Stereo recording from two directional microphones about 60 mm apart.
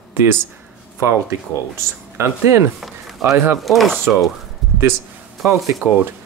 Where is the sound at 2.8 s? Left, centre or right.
Centre.